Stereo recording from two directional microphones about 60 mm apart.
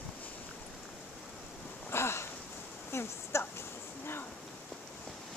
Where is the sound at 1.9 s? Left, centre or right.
Left.